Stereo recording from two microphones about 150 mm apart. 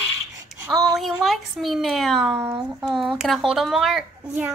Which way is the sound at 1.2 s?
Centre (ahead or behind).